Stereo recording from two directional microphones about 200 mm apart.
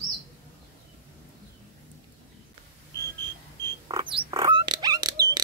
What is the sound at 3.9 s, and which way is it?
Music, 25° right (ahead or behind).